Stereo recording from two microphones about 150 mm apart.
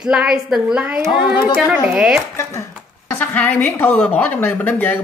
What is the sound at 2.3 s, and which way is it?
A woman's voice, 20° left (ahead or behind).